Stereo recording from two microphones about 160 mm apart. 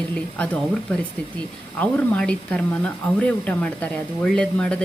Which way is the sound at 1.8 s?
5° left (ahead or behind).